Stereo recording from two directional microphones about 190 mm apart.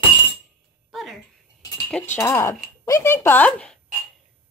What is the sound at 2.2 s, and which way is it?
Speech, 15° left (ahead or behind).